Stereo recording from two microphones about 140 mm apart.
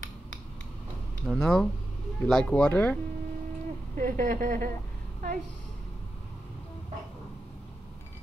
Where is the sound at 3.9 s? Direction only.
70° right (ahead or behind).